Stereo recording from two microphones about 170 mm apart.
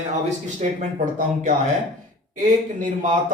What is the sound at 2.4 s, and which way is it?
Speech, 50° right (ahead or behind).